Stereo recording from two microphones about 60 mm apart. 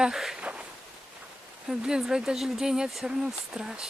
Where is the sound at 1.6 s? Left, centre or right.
Centre.